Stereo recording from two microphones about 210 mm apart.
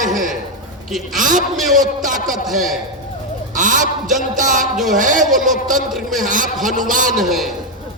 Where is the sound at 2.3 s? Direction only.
Centre (ahead or behind).